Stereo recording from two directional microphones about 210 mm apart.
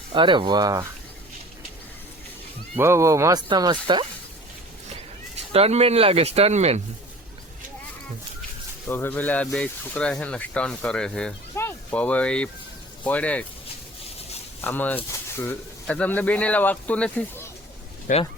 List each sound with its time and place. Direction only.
0.1 s speech: 20° right (ahead or behind)
2.7 s speech: 10° right (ahead or behind)
5.5 s speech: 30° right (ahead or behind)
8.9 s speech: 10° left (ahead or behind)
14.6 s speech: 10° left (ahead or behind)
18.1 s speech: 40° left (ahead or behind)